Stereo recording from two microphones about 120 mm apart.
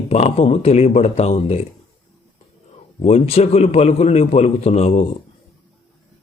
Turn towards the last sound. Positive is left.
turn(degrees=65)  # may be behind; listen again after turning